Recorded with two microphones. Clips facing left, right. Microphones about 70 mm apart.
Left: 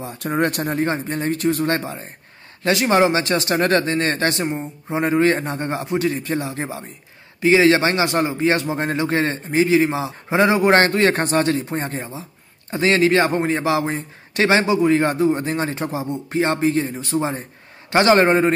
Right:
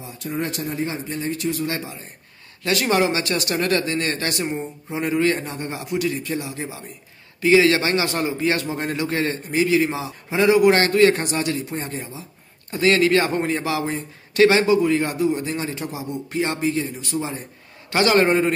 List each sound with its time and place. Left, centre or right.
0.0 s speech: left
2.6 s a man's voice: left
7.4 s a man's voice: left